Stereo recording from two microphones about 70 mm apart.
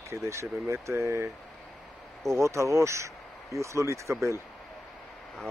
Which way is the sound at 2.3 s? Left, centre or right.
Right.